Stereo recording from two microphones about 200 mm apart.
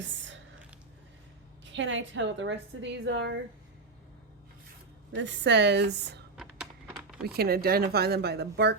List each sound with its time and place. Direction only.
0.0 s whispering: 65° right (ahead or behind)
1.6 s a woman's voice: 65° right (ahead or behind)
5.1 s a woman's voice: 65° right (ahead or behind)
6.3 s typing: 5° right (ahead or behind)
7.3 s speech: 50° right (ahead or behind)